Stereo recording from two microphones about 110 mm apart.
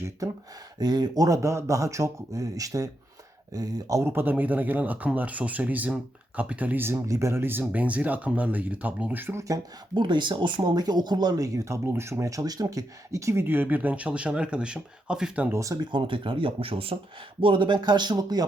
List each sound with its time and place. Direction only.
0.8 s speech: 40° right (ahead or behind)
9.9 s speech: 45° right (ahead or behind); by 15.5 s 10° right (ahead or behind)
15.5 s speech: 30° right (ahead or behind)
15.9 s speech: 50° right (ahead or behind)